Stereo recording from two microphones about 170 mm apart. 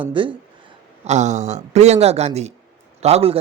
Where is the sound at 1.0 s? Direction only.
45° right (ahead or behind).